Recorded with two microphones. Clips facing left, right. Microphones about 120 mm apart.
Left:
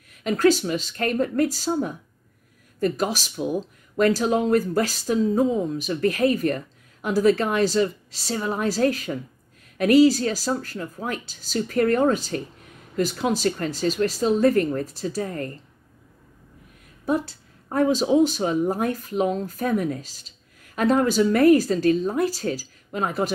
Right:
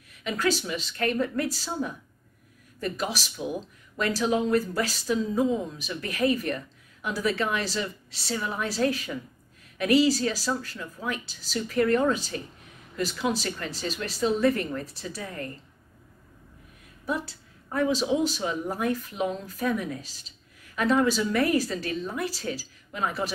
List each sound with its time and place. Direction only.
0.2 s speech: 45° left (ahead or behind)
17.0 s speech: 45° left (ahead or behind)